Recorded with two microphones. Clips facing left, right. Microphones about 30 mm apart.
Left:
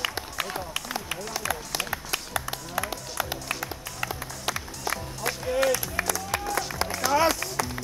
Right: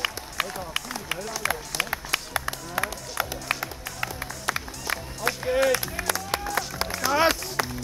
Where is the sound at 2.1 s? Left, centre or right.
Right.